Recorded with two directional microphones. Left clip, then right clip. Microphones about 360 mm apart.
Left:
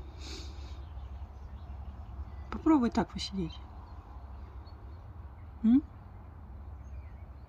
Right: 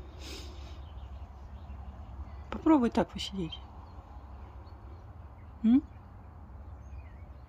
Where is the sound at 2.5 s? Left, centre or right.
Centre.